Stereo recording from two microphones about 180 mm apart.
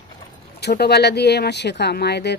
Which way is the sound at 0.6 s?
65° left (ahead or behind).